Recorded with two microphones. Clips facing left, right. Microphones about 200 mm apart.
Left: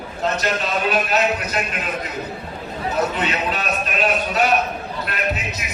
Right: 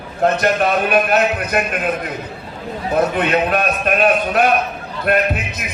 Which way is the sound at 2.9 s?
55° right (ahead or behind).